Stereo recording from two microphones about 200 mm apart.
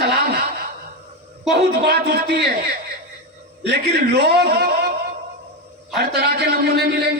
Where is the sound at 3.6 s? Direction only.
55° right (ahead or behind).